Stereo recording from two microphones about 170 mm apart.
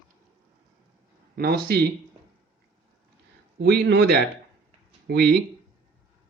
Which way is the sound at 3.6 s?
80° right.